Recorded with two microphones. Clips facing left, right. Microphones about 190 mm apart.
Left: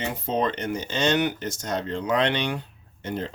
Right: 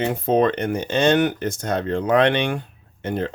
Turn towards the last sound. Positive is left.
turn(degrees=-55)  # may be behind; listen again after turning